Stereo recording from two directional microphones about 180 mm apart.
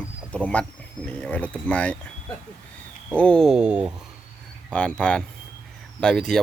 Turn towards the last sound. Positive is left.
turn(degrees=5)  # may be behind; listen again after turning